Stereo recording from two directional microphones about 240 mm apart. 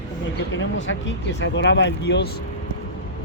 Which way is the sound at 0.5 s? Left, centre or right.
Left.